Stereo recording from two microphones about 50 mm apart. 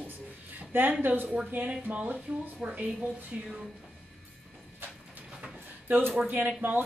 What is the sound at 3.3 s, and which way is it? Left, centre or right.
Speech, right.